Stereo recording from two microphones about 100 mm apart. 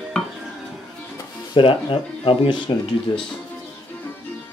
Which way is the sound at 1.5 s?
60° left (ahead or behind).